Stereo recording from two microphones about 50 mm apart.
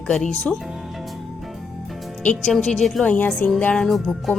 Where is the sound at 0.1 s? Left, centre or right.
Centre.